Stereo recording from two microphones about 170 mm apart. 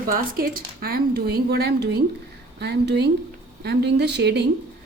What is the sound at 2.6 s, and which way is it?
Speech, 85° right.